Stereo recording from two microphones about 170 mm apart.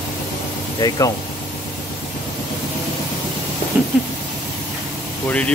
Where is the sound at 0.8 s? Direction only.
20° left (ahead or behind).